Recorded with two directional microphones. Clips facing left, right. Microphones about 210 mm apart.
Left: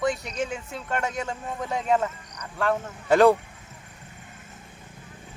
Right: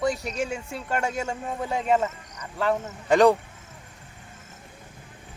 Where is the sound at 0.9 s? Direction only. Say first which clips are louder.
Right 1 dB; 30° right (ahead or behind).